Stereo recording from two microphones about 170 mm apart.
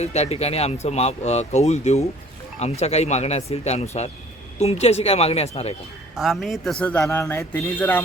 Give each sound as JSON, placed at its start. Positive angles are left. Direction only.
{"t": 0.0, "sound": "speech", "side_deg": 40}
{"t": 6.1, "sound": "a man's voice", "side_deg": 0}